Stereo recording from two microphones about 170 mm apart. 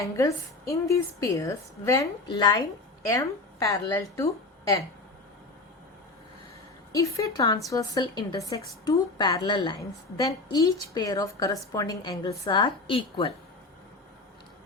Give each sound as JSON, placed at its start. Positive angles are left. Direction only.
{"t": 0.0, "sound": "a woman's voice", "side_deg": 20}
{"t": 6.9, "sound": "a woman's voice", "side_deg": 20}